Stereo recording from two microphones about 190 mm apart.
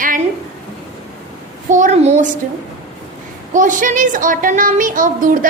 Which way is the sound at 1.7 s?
40° right (ahead or behind).